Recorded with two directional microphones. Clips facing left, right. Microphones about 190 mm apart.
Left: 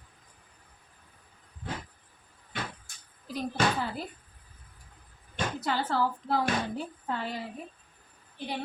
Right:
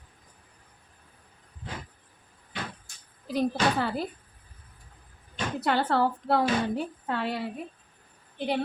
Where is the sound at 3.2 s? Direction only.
70° right (ahead or behind).